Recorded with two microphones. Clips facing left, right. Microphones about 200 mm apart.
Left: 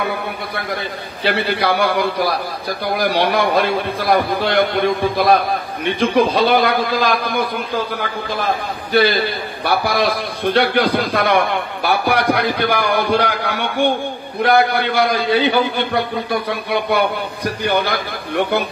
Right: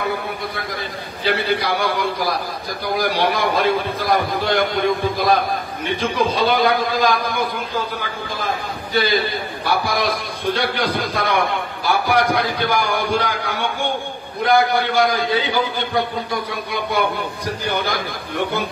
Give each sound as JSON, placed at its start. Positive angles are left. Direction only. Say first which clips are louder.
{"t": 1.2, "sound": "a man's voice", "louder": "left 2 dB", "side_deg": 65}
{"t": 8.9, "sound": "a man's voice", "louder": "left 4 dB", "side_deg": 65}